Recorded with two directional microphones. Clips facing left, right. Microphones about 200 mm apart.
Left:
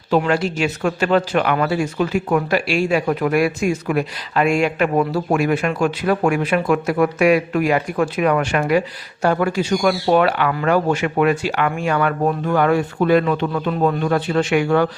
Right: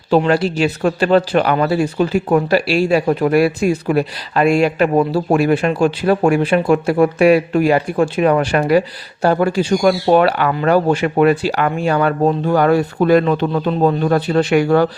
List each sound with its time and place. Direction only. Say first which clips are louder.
0.1 s speech: right 4 dB; 30° right (ahead or behind)